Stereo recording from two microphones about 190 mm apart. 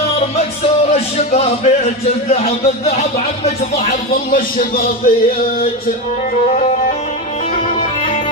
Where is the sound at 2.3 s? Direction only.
35° left (ahead or behind).